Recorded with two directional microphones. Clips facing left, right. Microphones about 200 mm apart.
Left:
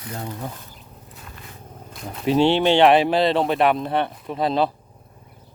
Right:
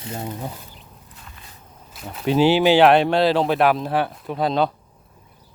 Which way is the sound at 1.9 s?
Centre (ahead or behind).